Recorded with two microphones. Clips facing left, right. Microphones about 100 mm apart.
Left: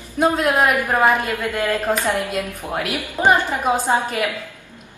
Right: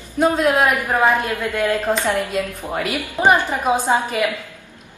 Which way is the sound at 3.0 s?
15° right (ahead or behind).